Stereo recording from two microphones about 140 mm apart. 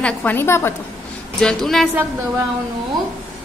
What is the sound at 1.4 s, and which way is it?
Speech, centre (ahead or behind).